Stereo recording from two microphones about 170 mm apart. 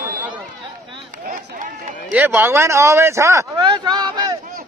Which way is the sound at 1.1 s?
55° right (ahead or behind).